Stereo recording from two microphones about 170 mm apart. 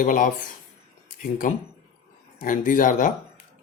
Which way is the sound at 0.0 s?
50° left (ahead or behind).